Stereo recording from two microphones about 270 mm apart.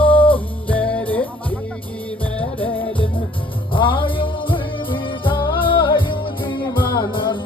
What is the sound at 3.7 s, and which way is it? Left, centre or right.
Music, centre.